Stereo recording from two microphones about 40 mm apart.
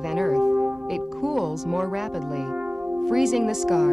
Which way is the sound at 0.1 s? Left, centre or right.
Centre.